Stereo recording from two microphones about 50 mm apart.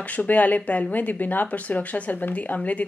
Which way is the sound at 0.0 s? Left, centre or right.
Left.